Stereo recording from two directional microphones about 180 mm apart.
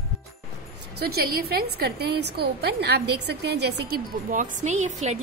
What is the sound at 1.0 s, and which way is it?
A woman's voice, 60° right (ahead or behind).